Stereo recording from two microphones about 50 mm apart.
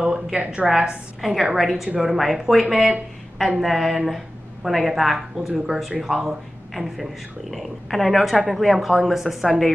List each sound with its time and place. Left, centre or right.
0.0 s a woman's voice: centre
1.2 s speech: centre